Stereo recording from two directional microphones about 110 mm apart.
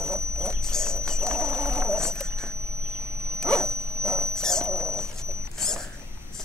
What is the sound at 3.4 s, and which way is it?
Dog, 5° left (ahead or behind).